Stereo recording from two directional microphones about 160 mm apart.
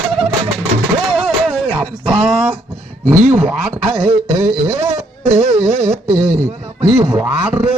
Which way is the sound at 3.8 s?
35° right (ahead or behind).